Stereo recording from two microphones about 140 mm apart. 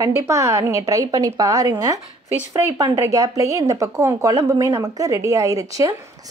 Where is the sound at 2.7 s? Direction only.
30° right (ahead or behind).